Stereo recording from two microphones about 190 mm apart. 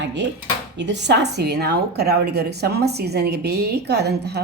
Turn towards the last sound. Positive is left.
turn(degrees=-60)  # may be behind; listen again after turning